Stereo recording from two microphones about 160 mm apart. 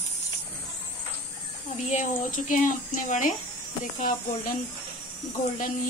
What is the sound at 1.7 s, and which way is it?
Speech, 50° left (ahead or behind).